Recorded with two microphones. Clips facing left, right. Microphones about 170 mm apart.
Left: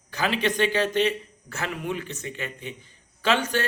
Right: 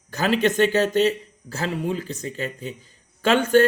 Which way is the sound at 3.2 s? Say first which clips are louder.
Right 7 dB; 50° right (ahead or behind).